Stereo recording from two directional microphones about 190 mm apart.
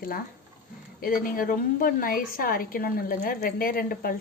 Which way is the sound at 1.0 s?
50° left (ahead or behind).